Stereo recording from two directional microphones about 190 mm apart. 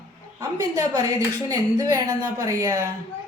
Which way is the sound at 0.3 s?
20° right (ahead or behind).